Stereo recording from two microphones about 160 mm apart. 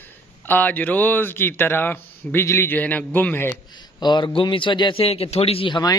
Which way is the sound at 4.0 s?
30° left (ahead or behind).